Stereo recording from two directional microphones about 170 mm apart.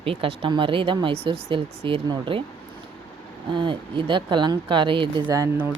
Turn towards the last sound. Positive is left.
turn(degrees=-20)  # may be behind; listen again after turning